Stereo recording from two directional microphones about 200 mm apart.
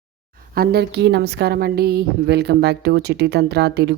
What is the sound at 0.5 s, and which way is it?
A woman's voice, 50° right (ahead or behind).